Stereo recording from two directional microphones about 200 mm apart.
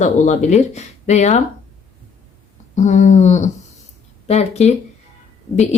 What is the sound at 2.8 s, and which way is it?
Speech, 35° left (ahead or behind).